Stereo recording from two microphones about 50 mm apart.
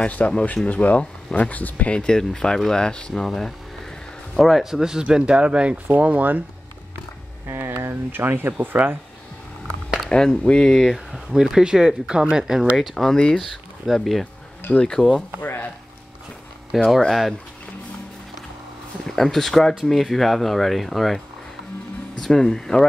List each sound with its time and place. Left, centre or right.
0.0 s speech: left
2.0 s speech: centre
5.1 s speech: centre
7.4 s a sound: right
7.8 s speech: right
10.0 s speech: centre
10.7 s speech: centre
13.4 s speech: centre
14.8 s speech: centre
15.4 s speech: left
16.7 s speech: centre
19.0 s speech: centre
22.2 s speech: centre